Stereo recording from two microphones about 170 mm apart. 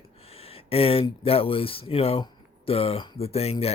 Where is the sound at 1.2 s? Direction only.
35° left (ahead or behind).